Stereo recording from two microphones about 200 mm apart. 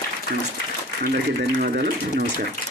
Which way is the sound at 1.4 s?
55° right (ahead or behind).